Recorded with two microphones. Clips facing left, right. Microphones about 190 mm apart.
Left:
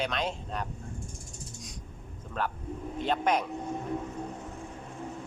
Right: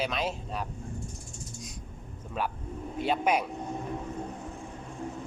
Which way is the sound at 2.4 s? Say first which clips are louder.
Even; 10° right (ahead or behind).